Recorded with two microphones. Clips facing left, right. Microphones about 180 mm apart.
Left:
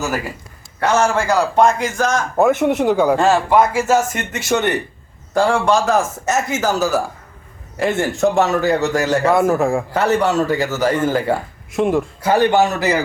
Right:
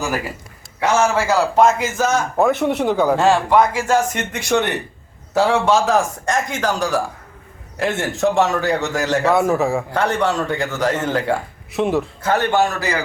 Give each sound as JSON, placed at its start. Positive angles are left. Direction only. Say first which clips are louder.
{"t": 0.8, "sound": "a man's voice", "louder": "left 1 dB", "side_deg": -10}
{"t": 2.7, "sound": "a man's voice", "louder": "left 2 dB", "side_deg": 10}
{"t": 3.1, "sound": "a man's voice", "louder": "left 1 dB", "side_deg": 0}
{"t": 12.2, "sound": "a man's voice", "louder": "left 4 dB", "side_deg": 10}